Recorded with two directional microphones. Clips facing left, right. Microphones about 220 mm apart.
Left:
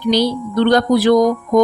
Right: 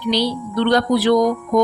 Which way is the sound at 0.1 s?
45° left (ahead or behind).